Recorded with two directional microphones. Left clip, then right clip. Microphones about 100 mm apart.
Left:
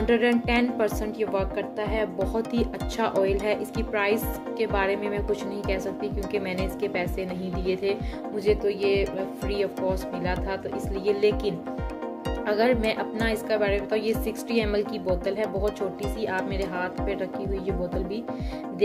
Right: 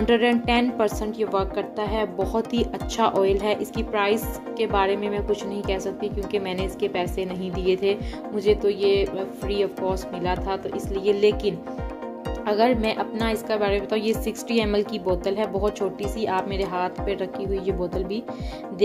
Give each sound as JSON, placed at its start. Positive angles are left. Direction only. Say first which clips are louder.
{"t": 0.0, "sound": "a woman's voice", "louder": "right 2 dB", "side_deg": -35}